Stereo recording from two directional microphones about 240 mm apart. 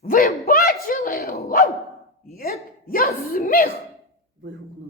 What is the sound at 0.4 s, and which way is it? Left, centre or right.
Dog, left.